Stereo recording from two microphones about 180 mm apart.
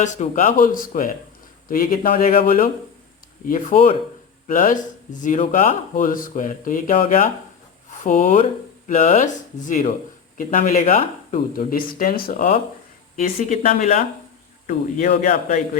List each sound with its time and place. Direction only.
0.0 s speech: 45° left (ahead or behind)
12.4 s speech: 40° left (ahead or behind)